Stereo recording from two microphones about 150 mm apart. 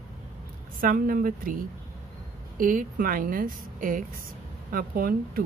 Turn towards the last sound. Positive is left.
turn(degrees=-75)  # may be behind; listen again after turning